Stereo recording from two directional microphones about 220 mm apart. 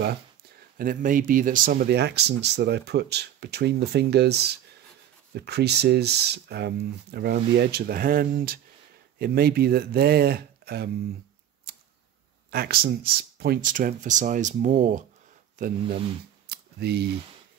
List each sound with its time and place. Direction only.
0.7 s speech: 40° right (ahead or behind)
12.4 s speech: 45° right (ahead or behind)
16.4 s a sound: 50° right (ahead or behind)